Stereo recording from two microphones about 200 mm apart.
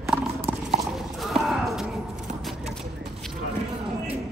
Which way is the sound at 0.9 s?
Centre (ahead or behind).